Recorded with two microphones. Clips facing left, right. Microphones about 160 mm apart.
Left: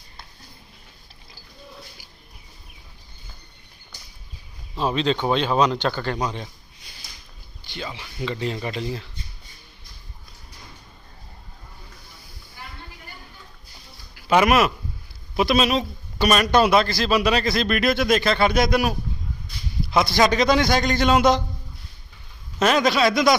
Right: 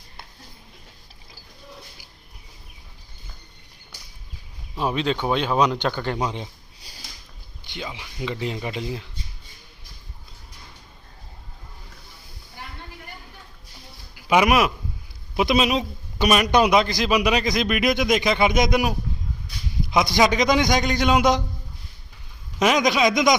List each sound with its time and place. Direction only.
4.8 s a man's voice: 15° right (ahead or behind)
7.7 s a man's voice: 15° right (ahead or behind)
14.2 s a man's voice: 10° right (ahead or behind)
22.5 s a man's voice: 15° right (ahead or behind)